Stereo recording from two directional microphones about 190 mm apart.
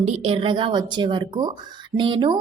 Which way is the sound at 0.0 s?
30° right (ahead or behind).